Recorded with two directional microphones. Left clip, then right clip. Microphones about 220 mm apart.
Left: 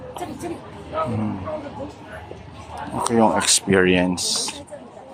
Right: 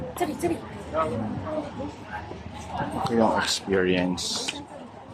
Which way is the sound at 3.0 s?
30° left (ahead or behind).